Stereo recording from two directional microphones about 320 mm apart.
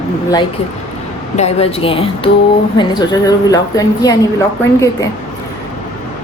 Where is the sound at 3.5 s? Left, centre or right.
Centre.